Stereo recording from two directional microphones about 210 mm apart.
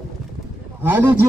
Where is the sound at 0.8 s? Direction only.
10° right (ahead or behind).